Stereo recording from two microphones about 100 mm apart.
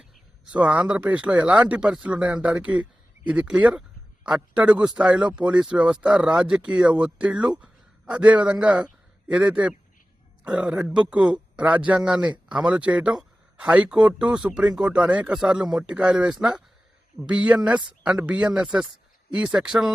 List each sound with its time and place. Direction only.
0.0 s a man's voice: 10° right (ahead or behind)